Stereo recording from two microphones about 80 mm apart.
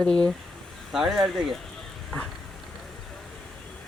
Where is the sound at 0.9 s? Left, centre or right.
Centre.